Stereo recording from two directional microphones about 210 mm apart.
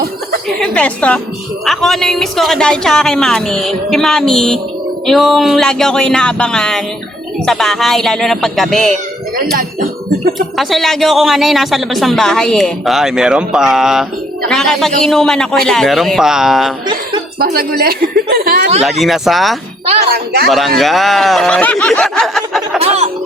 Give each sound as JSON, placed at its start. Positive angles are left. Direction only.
{"t": 0.6, "sound": "a woman's voice", "side_deg": 5}
{"t": 9.4, "sound": "speech", "side_deg": -45}
{"t": 10.6, "sound": "speech", "side_deg": 0}
{"t": 17.4, "sound": "speech", "side_deg": -45}
{"t": 18.9, "sound": "speech", "side_deg": 0}
{"t": 19.8, "sound": "music", "side_deg": -30}
{"t": 20.5, "sound": "speech", "side_deg": 0}
{"t": 22.8, "sound": "speech", "side_deg": -30}